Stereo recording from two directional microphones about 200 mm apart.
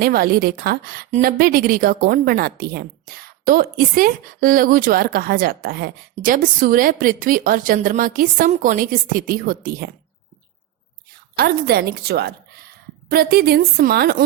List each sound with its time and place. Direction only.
0.0 s a woman's voice: 50° right (ahead or behind)
11.3 s a woman's voice: 50° right (ahead or behind)